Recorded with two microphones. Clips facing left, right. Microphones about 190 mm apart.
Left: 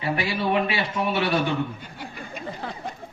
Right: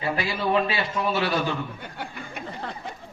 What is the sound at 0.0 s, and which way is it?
Speech, 30° left (ahead or behind).